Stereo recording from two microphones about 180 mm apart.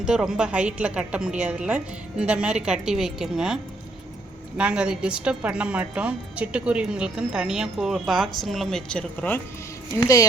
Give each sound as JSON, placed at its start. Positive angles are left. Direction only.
{"t": 0.0, "sound": "a woman's voice", "side_deg": -5}
{"t": 10.0, "sound": "a woman's voice", "side_deg": 20}